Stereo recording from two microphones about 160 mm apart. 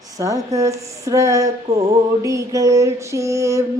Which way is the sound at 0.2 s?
20° right (ahead or behind).